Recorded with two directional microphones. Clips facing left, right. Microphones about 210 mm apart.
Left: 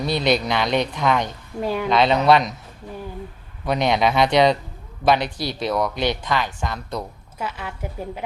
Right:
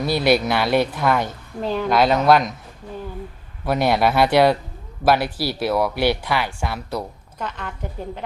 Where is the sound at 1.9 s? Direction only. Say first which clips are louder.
Right 1 dB; 5° right (ahead or behind).